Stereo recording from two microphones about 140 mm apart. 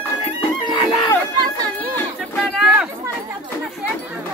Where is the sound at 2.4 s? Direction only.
Centre (ahead or behind).